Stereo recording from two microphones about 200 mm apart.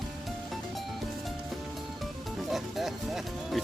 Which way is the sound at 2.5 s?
Centre (ahead or behind).